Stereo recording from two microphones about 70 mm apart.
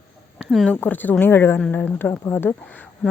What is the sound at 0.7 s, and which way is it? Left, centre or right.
A woman's voice, left.